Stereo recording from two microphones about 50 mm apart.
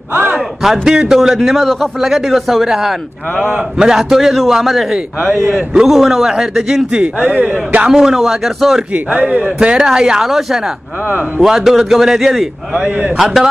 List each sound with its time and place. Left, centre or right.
0.6 s a man's voice: centre
5.9 s a man's voice: centre
7.2 s a man's voice: right
7.9 s a man's voice: centre
8.9 s a man's voice: right
9.6 s a man's voice: centre
12.8 s a man's voice: right
13.2 s a man's voice: centre